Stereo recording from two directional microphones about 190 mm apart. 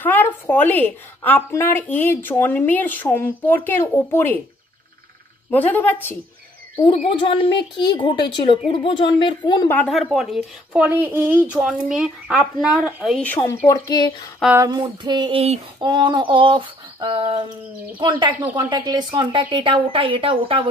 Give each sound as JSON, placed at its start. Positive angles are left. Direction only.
{"t": 0.0, "sound": "a woman's voice", "side_deg": 10}
{"t": 5.5, "sound": "a woman's voice", "side_deg": 10}
{"t": 7.2, "sound": "a woman's voice", "side_deg": 25}
{"t": 9.7, "sound": "speech", "side_deg": 5}
{"t": 13.3, "sound": "a woman's voice", "side_deg": 10}
{"t": 13.7, "sound": "a woman's voice", "side_deg": 20}
{"t": 14.6, "sound": "female singing", "side_deg": -20}